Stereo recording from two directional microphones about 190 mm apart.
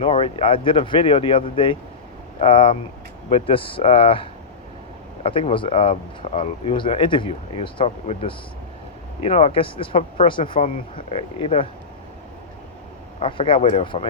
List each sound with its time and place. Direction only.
0.0 s speech: 30° left (ahead or behind)
13.1 s speech: 30° left (ahead or behind)